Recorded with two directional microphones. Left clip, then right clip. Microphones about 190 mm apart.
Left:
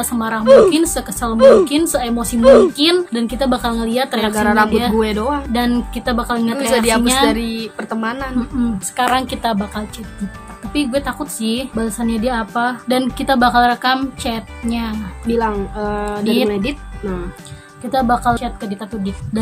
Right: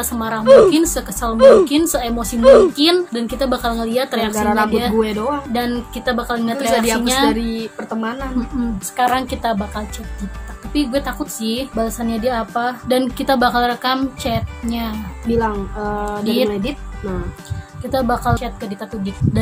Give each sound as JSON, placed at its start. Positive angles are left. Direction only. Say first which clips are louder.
{"t": 0.0, "sound": "a woman's voice", "louder": "left 1 dB", "side_deg": -10}
{"t": 4.4, "sound": "speech", "louder": "left 3 dB", "side_deg": 20}
{"t": 4.6, "sound": "a woman's voice", "louder": "left 1 dB", "side_deg": -5}
{"t": 4.9, "sound": "speech", "louder": "left 1 dB", "side_deg": 20}
{"t": 5.5, "sound": "a woman's voice", "louder": "left 2 dB", "side_deg": -5}
{"t": 6.6, "sound": "speech", "louder": "left 2 dB", "side_deg": 20}
{"t": 8.5, "sound": "a woman's voice", "louder": "even", "side_deg": 0}
{"t": 15.2, "sound": "speech", "louder": "left 1 dB", "side_deg": 20}
{"t": 16.2, "sound": "a woman's voice", "louder": "left 1 dB", "side_deg": -5}
{"t": 17.9, "sound": "a woman's voice", "louder": "left 3 dB", "side_deg": -10}